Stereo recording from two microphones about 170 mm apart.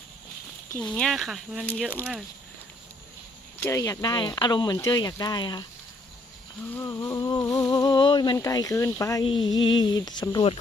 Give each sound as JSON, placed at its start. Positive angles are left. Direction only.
{"t": 0.9, "sound": "speech", "side_deg": 0}
{"t": 3.6, "sound": "speech", "side_deg": 20}
{"t": 6.7, "sound": "speech", "side_deg": 20}